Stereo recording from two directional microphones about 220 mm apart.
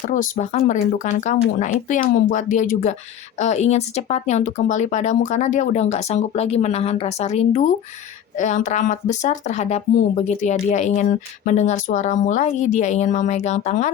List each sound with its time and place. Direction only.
0.1 s speech: 35° left (ahead or behind)